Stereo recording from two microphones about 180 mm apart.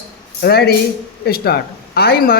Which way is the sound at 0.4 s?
60° left (ahead or behind).